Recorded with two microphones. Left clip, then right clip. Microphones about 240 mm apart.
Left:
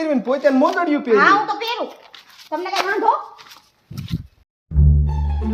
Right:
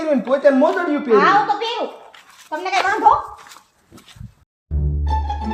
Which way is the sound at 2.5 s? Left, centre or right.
Right.